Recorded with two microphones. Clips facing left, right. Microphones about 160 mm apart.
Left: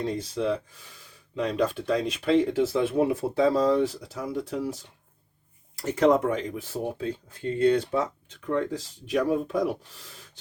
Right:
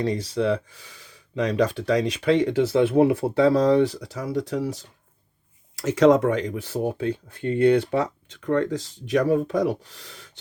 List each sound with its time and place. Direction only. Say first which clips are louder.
0.0 s speech: right 4 dB; 80° right